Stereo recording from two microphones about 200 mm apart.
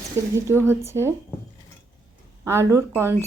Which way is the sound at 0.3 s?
15° right (ahead or behind).